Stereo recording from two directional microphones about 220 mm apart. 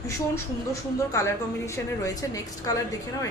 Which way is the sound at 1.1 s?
10° left (ahead or behind).